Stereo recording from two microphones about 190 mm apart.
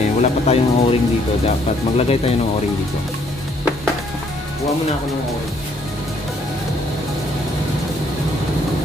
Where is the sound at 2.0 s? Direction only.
30° left (ahead or behind).